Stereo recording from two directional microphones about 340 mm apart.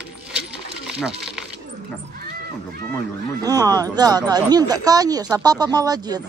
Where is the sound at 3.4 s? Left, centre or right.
Centre.